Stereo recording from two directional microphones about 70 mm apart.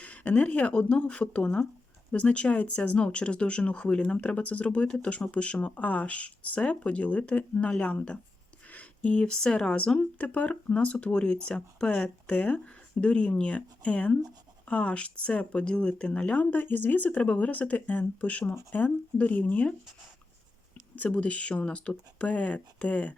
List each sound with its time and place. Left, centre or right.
0.0 s speech: centre
20.9 s speech: centre